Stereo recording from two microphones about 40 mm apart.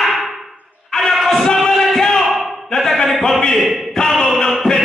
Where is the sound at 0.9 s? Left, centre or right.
Centre.